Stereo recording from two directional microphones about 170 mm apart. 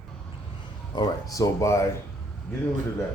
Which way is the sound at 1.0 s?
20° left (ahead or behind).